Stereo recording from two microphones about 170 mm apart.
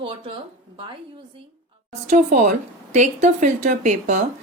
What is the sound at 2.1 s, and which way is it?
A woman's voice, 50° right (ahead or behind).